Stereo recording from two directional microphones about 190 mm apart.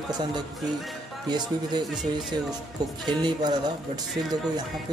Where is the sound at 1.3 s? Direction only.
20° right (ahead or behind).